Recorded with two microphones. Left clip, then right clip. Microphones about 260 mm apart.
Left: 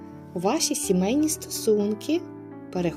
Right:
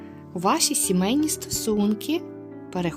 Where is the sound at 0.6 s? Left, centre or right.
Right.